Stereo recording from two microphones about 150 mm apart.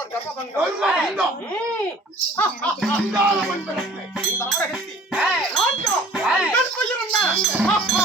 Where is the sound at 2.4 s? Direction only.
5° left (ahead or behind).